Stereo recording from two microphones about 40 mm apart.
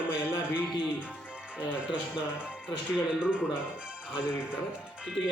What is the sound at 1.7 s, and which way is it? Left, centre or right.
Music, right.